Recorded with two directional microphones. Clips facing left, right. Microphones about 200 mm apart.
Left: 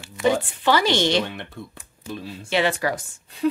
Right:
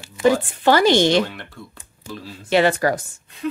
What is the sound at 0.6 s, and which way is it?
Speech, 45° right (ahead or behind).